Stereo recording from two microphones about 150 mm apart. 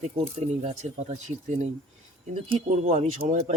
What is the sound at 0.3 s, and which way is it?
Speech, 45° right (ahead or behind).